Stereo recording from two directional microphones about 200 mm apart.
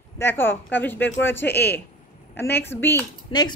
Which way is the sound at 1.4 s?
55° left (ahead or behind).